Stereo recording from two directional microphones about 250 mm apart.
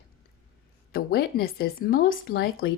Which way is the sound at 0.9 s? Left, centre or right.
Left.